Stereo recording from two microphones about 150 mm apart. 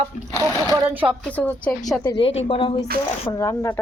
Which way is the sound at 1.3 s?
10° left (ahead or behind).